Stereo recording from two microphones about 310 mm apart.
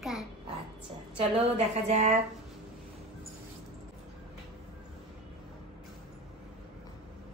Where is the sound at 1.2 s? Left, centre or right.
Centre.